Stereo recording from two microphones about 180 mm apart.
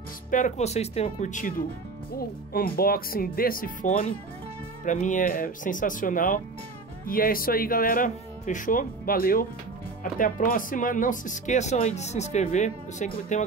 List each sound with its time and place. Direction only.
0.3 s speech: 40° left (ahead or behind)